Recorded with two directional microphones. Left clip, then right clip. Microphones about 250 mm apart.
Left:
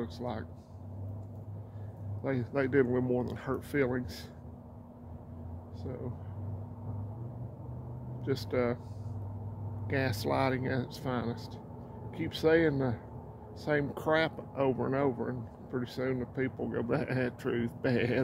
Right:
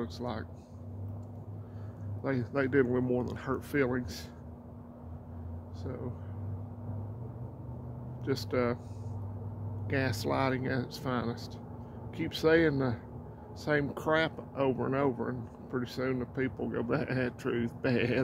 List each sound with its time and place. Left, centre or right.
0.0 s speech: centre
2.2 s speech: centre
8.3 s speech: centre
9.8 s speech: centre